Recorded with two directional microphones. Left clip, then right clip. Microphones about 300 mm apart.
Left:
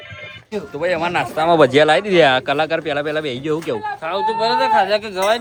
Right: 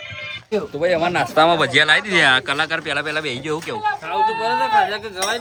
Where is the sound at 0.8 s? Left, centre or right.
Centre.